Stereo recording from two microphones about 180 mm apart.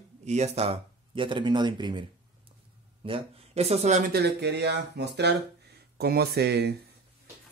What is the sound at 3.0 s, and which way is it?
Speech, 35° right (ahead or behind).